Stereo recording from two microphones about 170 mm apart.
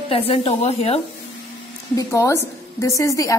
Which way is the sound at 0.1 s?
35° left (ahead or behind).